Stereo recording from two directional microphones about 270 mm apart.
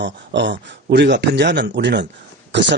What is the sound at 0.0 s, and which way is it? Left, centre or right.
Speech, right.